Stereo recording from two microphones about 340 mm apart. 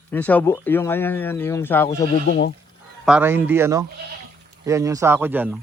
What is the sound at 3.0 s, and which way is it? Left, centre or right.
Speech, centre.